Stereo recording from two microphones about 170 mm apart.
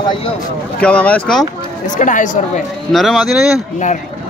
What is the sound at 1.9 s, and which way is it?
Speech, 50° left (ahead or behind).